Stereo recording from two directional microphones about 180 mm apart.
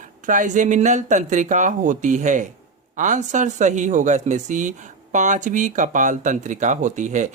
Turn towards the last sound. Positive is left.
turn(degrees=-45)  # may be behind; listen again after turning